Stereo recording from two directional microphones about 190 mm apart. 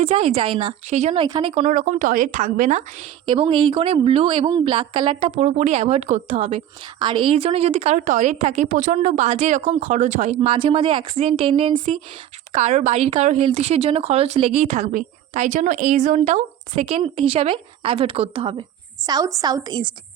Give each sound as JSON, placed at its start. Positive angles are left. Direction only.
{"t": 0.0, "sound": "speech", "side_deg": -30}
{"t": 1.2, "sound": "a woman's voice", "side_deg": -25}
{"t": 1.7, "sound": "a woman's voice", "side_deg": -45}
{"t": 3.2, "sound": "a woman's voice", "side_deg": -25}